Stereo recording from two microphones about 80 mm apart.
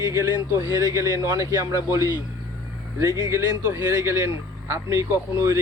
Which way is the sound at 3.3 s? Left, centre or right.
Right.